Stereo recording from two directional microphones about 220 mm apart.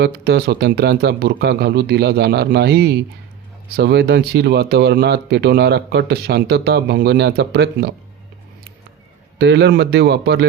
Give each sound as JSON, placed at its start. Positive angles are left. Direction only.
{"t": 0.0, "sound": "speech", "side_deg": -45}
{"t": 9.4, "sound": "speech", "side_deg": -50}